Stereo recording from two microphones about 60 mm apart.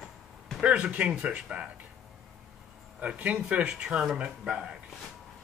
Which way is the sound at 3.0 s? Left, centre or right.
Right.